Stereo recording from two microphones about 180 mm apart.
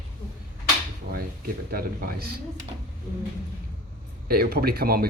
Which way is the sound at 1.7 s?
55° right (ahead or behind).